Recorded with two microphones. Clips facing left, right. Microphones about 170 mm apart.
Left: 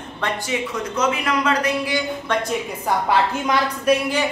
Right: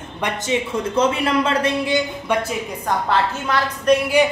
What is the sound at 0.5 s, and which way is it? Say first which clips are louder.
Speech: right 4 dB; 25° right (ahead or behind).